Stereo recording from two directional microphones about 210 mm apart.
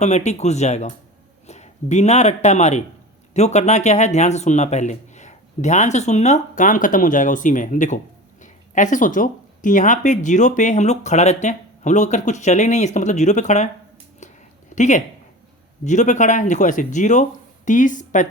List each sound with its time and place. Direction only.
0.3 s speech: 30° left (ahead or behind)
14.2 s a sound: 35° left (ahead or behind)
14.8 s speech: 35° left (ahead or behind)